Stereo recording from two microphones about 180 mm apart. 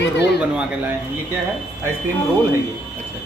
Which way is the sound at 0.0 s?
70° left (ahead or behind).